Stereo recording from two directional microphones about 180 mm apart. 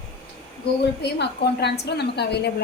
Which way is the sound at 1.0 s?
70° left (ahead or behind).